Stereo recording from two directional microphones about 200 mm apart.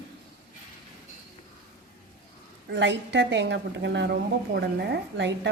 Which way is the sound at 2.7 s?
60° right (ahead or behind).